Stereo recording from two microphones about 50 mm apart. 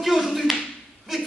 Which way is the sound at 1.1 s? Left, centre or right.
Centre.